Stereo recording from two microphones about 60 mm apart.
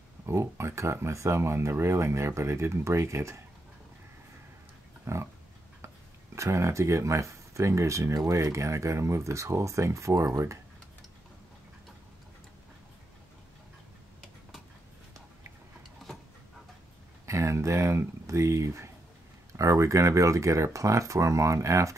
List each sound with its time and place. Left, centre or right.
0.3 s speech: right
5.0 s pig: right
6.3 s speech: right
17.3 s speech: right